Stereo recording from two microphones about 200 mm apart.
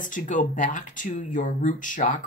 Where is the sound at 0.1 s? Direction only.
40° left (ahead or behind).